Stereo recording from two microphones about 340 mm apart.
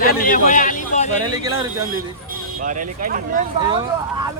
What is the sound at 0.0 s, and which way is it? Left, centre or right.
A man's voice, left.